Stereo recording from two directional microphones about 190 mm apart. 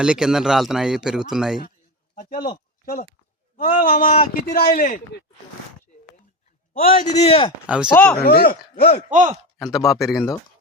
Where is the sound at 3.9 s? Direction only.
45° left (ahead or behind).